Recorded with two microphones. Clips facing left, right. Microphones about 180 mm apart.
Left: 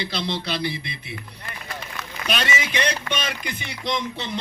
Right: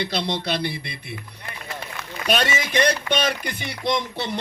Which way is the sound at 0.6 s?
60° right (ahead or behind).